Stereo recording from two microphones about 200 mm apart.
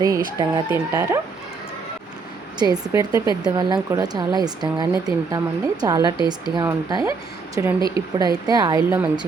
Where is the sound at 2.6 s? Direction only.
20° right (ahead or behind).